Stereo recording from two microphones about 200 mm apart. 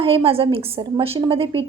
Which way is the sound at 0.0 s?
30° right (ahead or behind).